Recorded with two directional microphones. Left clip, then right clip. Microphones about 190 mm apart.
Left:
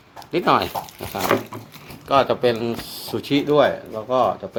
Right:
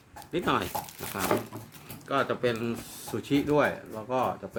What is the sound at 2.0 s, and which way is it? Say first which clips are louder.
Speech: left 10 dB; 5° left (ahead or behind).